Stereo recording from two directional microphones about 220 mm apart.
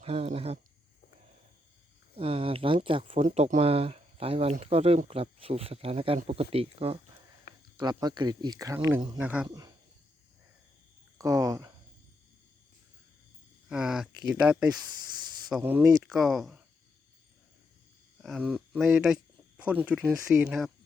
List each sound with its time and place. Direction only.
0.0 s speech: 25° right (ahead or behind)
2.1 s speech: 25° right (ahead or behind); by 9.5 s 5° right (ahead or behind)
9.5 s speech: 15° right (ahead or behind)
11.2 s speech: 15° right (ahead or behind)
13.7 s speech: 5° right (ahead or behind)
16.0 s speech: centre (ahead or behind)
18.2 s speech: 5° right (ahead or behind)